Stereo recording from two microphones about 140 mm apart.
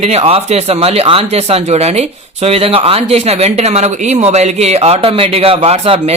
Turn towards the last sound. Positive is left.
turn(degrees=-40)  # may be behind; listen again after turning